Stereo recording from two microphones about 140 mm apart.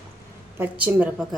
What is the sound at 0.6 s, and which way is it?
Speech, 10° right (ahead or behind).